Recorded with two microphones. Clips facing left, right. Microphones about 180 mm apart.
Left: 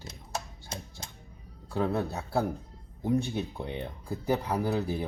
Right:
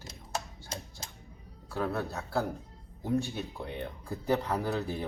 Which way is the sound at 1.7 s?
15° left (ahead or behind).